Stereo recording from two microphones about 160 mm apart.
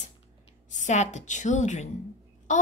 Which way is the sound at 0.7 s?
50° left (ahead or behind).